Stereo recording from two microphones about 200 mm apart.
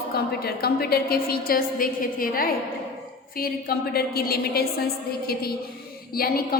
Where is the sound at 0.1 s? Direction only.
50° left (ahead or behind).